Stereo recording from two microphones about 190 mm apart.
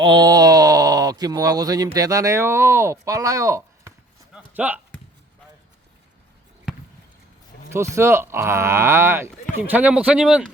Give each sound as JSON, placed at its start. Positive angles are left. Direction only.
{"t": 0.0, "sound": "speech", "side_deg": -20}
{"t": 4.4, "sound": "a sound", "side_deg": -10}
{"t": 7.7, "sound": "speech", "side_deg": -15}